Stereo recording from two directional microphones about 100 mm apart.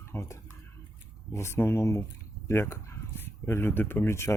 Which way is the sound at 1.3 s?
30° left (ahead or behind).